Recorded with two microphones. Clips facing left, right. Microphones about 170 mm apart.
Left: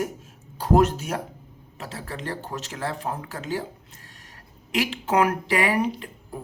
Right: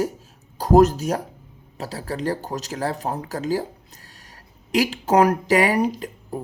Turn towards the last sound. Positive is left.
turn(degrees=-40)  # may be behind; listen again after turning